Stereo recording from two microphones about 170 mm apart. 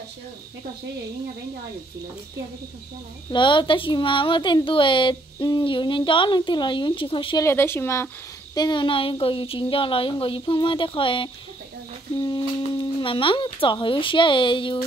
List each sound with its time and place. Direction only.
3.3 s speech: 30° left (ahead or behind)
7.4 s speech: 15° left (ahead or behind)
8.5 s a woman's voice: 25° left (ahead or behind)